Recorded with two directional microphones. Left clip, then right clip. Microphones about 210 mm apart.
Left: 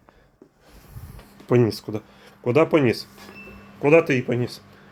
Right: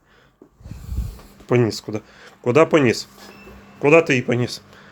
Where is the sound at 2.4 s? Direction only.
15° right (ahead or behind).